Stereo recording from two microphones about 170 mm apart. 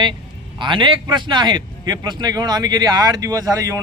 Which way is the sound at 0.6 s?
30° right (ahead or behind).